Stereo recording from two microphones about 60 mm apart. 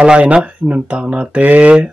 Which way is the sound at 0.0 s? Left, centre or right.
Centre.